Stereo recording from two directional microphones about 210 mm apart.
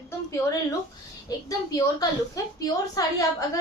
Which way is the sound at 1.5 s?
15° left (ahead or behind).